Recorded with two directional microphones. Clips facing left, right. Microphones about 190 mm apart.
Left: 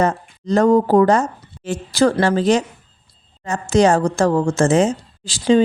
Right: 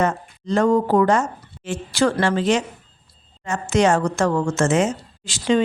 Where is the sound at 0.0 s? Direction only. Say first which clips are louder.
Left 3 dB; 40° left (ahead or behind).